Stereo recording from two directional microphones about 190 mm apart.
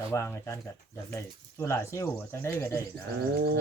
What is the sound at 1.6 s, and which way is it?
Speech, 15° left (ahead or behind).